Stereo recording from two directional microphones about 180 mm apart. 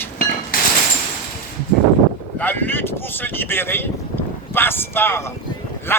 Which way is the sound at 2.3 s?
10° left (ahead or behind).